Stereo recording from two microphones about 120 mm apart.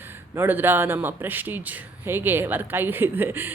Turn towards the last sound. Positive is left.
turn(degrees=-15)  # may be behind; listen again after turning